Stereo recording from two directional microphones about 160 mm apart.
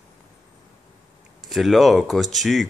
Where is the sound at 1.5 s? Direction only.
Centre (ahead or behind).